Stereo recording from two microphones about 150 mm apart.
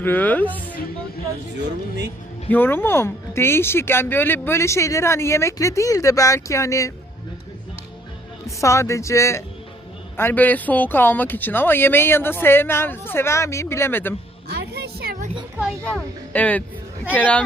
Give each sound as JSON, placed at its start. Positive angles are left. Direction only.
{"t": 0.0, "sound": "speech", "side_deg": 10}
{"t": 2.5, "sound": "speech", "side_deg": 15}
{"t": 8.6, "sound": "speech", "side_deg": 20}
{"t": 14.4, "sound": "a sound", "side_deg": -90}
{"t": 16.0, "sound": "speech", "side_deg": 10}